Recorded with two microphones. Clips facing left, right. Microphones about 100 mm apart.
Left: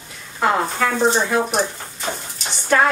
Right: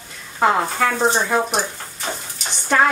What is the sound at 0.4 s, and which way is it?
Speech, 5° right (ahead or behind).